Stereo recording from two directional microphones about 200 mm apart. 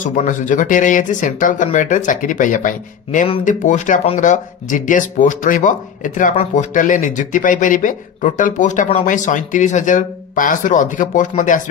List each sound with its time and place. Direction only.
0.0 s speech: 40° left (ahead or behind)